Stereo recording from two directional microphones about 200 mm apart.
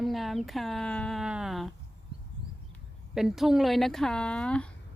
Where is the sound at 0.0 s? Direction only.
Centre (ahead or behind).